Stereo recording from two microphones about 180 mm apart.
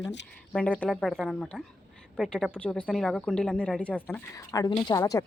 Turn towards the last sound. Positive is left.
turn(degrees=20)  # may be behind; listen again after turning